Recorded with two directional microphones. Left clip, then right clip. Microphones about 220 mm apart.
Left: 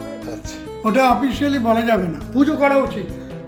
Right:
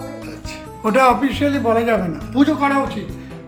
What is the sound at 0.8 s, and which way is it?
A man's voice, 5° right (ahead or behind).